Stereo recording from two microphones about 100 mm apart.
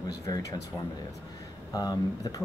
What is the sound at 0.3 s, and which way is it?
Speech, 35° left (ahead or behind).